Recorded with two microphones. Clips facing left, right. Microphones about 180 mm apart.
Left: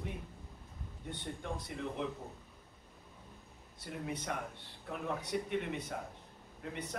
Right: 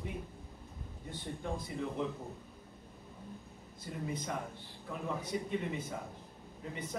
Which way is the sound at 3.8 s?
70° left (ahead or behind).